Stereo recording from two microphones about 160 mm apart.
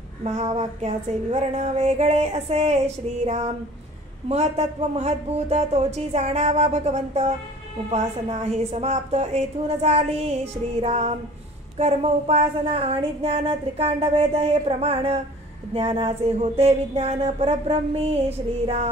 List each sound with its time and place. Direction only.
0.2 s speech: 40° right (ahead or behind)
4.3 s speech: 40° right (ahead or behind)